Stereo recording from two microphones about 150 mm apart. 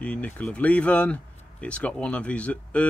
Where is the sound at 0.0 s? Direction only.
10° left (ahead or behind).